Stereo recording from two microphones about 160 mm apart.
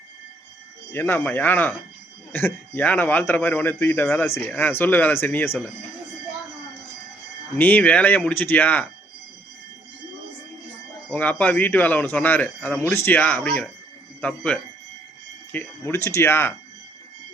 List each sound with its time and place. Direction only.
0.9 s speech: 15° left (ahead or behind)
7.6 s speech: 10° left (ahead or behind)
11.1 s speech: 10° left (ahead or behind)